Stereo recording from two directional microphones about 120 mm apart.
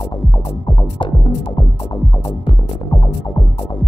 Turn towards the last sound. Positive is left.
turn(degrees=45)  # may be behind; listen again after turning